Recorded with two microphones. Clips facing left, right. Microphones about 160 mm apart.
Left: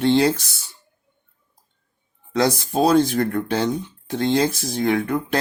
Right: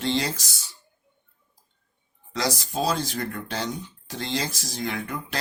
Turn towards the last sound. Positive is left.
turn(degrees=55)  # may be behind; listen again after turning